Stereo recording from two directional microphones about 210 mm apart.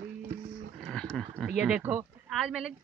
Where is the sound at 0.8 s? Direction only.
5° left (ahead or behind).